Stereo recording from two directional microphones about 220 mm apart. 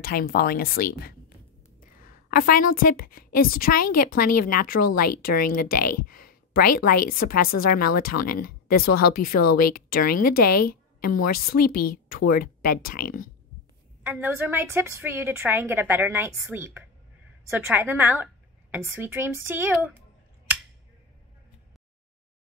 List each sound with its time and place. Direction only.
0.0 s a woman's voice: 45° left (ahead or behind)
14.0 s a woman's voice: 10° right (ahead or behind)